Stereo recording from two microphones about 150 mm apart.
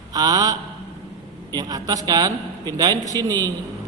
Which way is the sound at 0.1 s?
25° right (ahead or behind).